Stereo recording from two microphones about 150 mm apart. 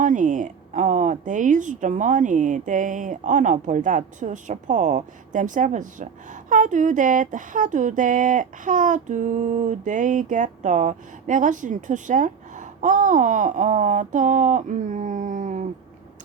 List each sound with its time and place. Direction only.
0.0 s speech: 55° right (ahead or behind)